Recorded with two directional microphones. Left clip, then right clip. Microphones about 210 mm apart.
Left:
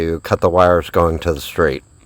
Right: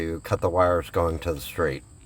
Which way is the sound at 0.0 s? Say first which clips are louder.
Left 10 dB; 45° left (ahead or behind).